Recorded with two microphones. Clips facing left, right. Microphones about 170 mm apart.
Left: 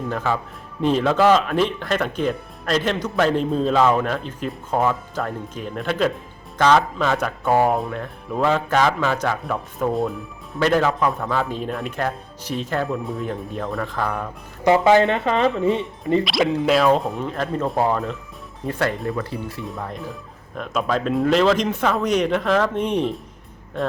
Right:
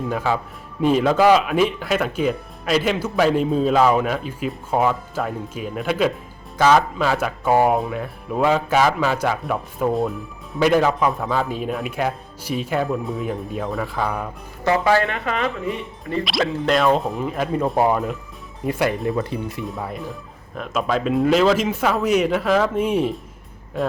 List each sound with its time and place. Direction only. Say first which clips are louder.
0.1 s speech: even; 10° right (ahead or behind)
14.6 s speech: left 3 dB; 20° left (ahead or behind)
16.6 s speech: right 1 dB; centre (ahead or behind); by 19.4 s 20° right (ahead or behind)
19.6 s speech: right 2 dB; 5° right (ahead or behind)